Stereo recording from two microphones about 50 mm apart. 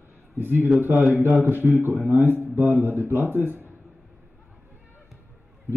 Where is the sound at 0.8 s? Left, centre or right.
Right.